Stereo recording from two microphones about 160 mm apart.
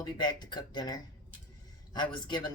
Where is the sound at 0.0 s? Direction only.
25° left (ahead or behind).